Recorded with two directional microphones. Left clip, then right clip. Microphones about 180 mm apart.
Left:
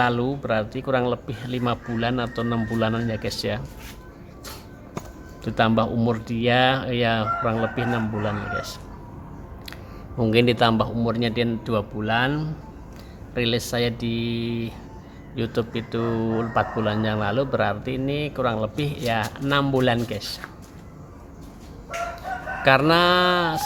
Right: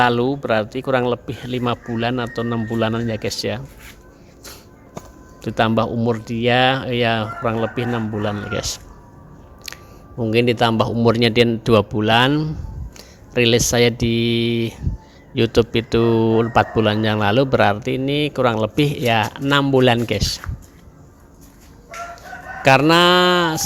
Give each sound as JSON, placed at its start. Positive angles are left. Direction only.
{"t": 0.0, "sound": "speech", "side_deg": -45}
{"t": 5.4, "sound": "speech", "side_deg": -35}
{"t": 10.2, "sound": "speech", "side_deg": -20}
{"t": 10.8, "sound": "speech", "side_deg": -40}
{"t": 22.6, "sound": "speech", "side_deg": -35}